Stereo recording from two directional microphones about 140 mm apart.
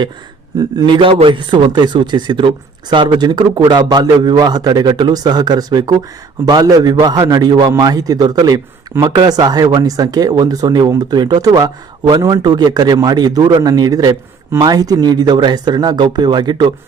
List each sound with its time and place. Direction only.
0.8 s speech: 35° right (ahead or behind)